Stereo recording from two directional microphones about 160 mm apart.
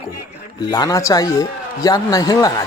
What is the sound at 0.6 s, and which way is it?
A man's voice, 25° left (ahead or behind).